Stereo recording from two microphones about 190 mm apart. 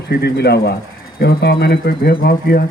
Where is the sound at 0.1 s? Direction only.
60° left (ahead or behind).